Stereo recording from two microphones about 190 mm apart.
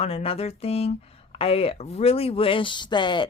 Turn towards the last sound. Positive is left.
turn(degrees=25)  # may be behind; listen again after turning